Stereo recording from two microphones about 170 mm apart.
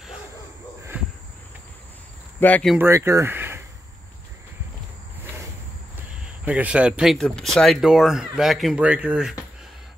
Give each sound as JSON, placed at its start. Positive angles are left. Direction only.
{"t": 0.9, "sound": "cricket", "side_deg": -10}
{"t": 2.4, "sound": "speech", "side_deg": 10}
{"t": 2.8, "sound": "speech", "side_deg": -15}
{"t": 5.2, "sound": "a sound", "side_deg": -15}
{"t": 6.2, "sound": "speech", "side_deg": -10}